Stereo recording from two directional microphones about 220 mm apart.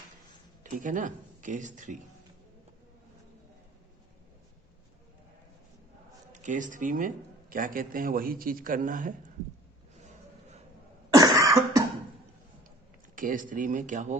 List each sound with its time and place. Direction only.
0.6 s speech: 35° right (ahead or behind)
6.3 s a man's voice: 35° right (ahead or behind)
11.1 s cough: 15° right (ahead or behind)
13.1 s a man's voice: 40° right (ahead or behind)